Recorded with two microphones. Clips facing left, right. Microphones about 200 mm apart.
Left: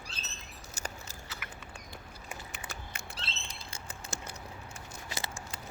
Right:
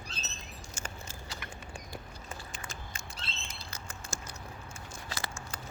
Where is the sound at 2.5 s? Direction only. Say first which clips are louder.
Even; 65° left (ahead or behind).